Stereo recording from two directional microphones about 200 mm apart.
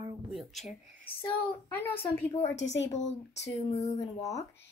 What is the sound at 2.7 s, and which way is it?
Speech, 65° left (ahead or behind).